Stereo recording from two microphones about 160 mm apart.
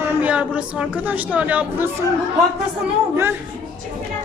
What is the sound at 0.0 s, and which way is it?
Speech, 10° right (ahead or behind).